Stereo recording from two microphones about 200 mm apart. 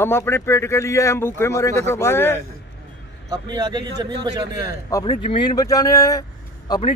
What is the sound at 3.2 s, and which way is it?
A man's voice, 20° right (ahead or behind).